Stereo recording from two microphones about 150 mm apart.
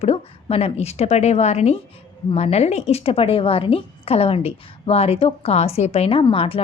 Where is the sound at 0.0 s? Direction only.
40° left (ahead or behind).